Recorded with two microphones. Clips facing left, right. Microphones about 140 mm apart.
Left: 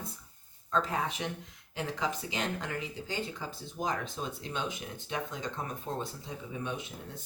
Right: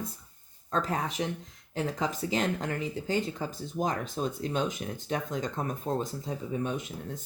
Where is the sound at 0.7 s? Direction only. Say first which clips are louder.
Right 1 dB; 40° right (ahead or behind).